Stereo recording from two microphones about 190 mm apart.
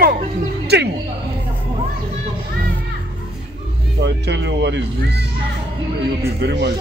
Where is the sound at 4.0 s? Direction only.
65° right (ahead or behind).